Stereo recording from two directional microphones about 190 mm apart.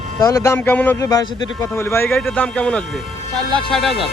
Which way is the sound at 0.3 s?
15° left (ahead or behind).